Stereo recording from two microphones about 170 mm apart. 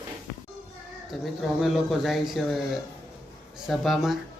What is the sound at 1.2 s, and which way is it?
A man's voice, centre (ahead or behind).